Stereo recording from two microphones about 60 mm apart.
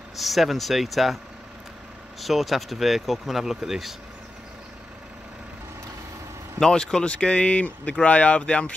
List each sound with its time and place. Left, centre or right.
0.2 s speech: centre
6.6 s speech: centre